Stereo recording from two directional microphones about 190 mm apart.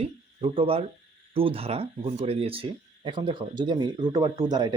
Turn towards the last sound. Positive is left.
turn(degrees=-20)  # may be behind; listen again after turning